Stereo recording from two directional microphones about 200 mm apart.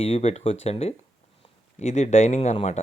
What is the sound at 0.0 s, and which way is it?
Speech, 30° left (ahead or behind).